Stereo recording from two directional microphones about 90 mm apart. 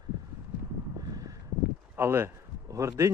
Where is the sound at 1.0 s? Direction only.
45° right (ahead or behind).